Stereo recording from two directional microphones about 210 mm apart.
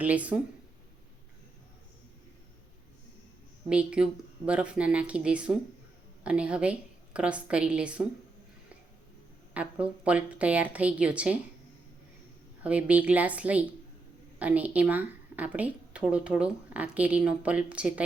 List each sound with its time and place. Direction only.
0.0 s a woman's voice: 5° right (ahead or behind)
3.7 s a woman's voice: 5° right (ahead or behind)
9.6 s a woman's voice: 5° right (ahead or behind)
12.6 s a woman's voice: 5° right (ahead or behind)